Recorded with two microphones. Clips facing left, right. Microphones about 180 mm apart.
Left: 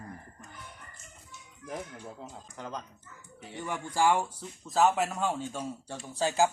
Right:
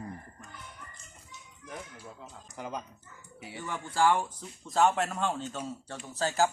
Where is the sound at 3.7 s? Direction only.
15° left (ahead or behind).